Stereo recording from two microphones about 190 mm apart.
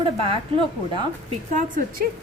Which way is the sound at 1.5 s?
45° right (ahead or behind).